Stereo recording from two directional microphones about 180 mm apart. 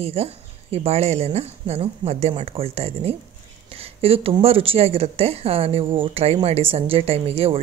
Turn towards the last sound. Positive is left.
turn(degrees=-35)  # may be behind; listen again after turning